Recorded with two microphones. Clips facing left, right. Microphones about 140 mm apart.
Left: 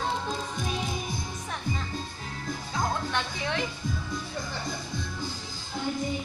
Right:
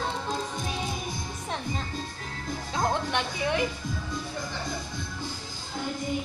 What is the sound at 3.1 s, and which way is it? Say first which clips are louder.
Music: right 3 dB; 10° right (ahead or behind).